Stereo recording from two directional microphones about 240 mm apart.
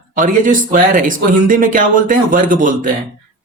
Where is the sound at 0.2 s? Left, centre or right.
Right.